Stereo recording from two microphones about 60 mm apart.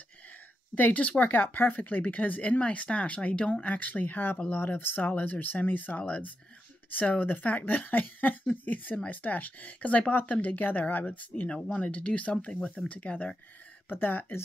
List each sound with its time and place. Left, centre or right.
0.7 s speech: left
13.8 s speech: left